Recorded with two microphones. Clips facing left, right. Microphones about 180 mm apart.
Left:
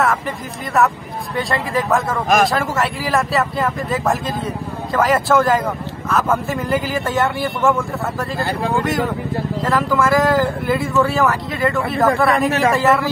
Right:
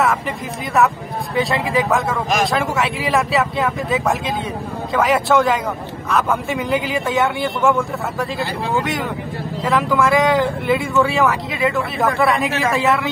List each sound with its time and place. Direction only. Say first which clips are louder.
0.7 s speech: even; centre (ahead or behind)